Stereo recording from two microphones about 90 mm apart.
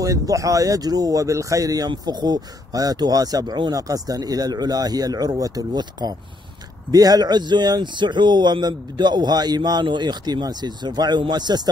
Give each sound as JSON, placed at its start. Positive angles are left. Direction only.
{"t": 0.0, "sound": "speech", "side_deg": -40}
{"t": 1.9, "sound": "speech", "side_deg": -55}